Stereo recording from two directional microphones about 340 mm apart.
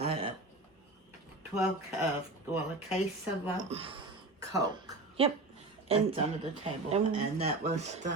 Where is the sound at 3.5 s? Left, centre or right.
Centre.